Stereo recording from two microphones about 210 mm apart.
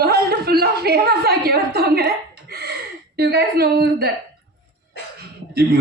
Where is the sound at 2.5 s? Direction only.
50° right (ahead or behind).